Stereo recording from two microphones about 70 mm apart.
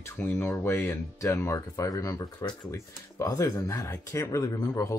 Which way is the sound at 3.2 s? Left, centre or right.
Left.